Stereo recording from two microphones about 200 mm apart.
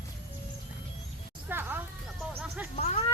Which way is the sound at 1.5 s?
10° right (ahead or behind).